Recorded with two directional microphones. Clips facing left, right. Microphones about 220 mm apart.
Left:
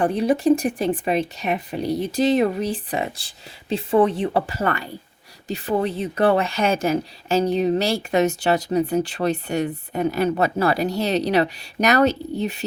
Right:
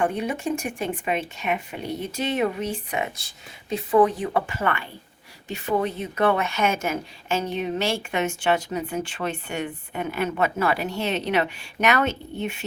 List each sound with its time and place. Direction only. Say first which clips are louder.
0.0 s a woman's voice: left 6 dB; 35° left (ahead or behind)